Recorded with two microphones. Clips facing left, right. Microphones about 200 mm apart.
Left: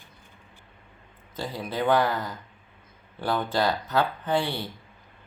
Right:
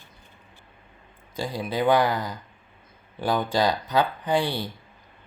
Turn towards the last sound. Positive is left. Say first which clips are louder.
# right 2 dB
turn(degrees=-15)  # may be behind; listen again after turning